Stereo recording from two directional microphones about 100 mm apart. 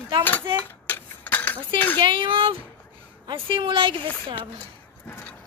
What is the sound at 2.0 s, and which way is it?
Speech, 60° right (ahead or behind).